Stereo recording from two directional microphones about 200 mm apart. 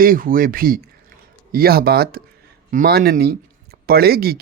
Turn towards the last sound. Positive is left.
turn(degrees=-50)  # may be behind; listen again after turning